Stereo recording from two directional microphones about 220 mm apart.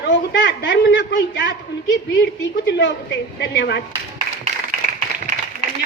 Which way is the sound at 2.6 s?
50° left (ahead or behind).